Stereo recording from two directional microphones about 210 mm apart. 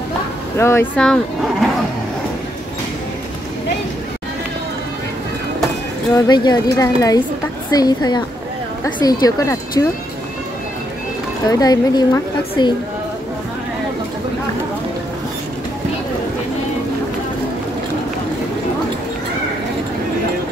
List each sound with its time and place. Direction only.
0.6 s speech: 10° left (ahead or behind)
6.1 s speech: 20° left (ahead or behind)
11.4 s speech: 20° left (ahead or behind)